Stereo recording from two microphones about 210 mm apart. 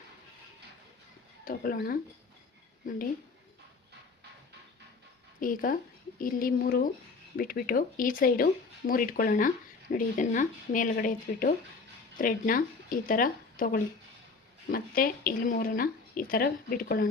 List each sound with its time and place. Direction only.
1.5 s speech: 40° left (ahead or behind)
5.4 s speech: 40° left (ahead or behind)